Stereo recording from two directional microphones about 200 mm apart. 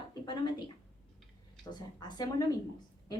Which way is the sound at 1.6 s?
20° left (ahead or behind).